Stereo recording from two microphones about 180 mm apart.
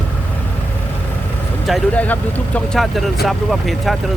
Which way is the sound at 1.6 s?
5° left (ahead or behind).